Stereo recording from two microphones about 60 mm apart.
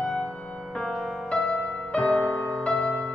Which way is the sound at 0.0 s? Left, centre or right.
Centre.